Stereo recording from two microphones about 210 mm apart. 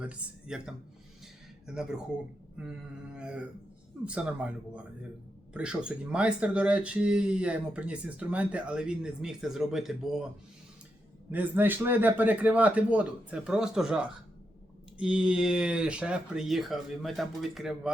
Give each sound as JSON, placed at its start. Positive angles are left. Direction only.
{"t": 0.0, "sound": "speech", "side_deg": -5}
{"t": 11.3, "sound": "speech", "side_deg": -10}